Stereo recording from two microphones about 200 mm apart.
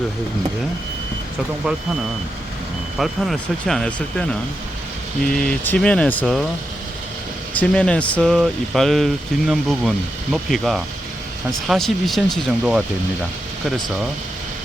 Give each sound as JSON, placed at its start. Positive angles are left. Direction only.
{"t": 3.0, "sound": "speech", "side_deg": 0}
{"t": 7.5, "sound": "speech", "side_deg": 5}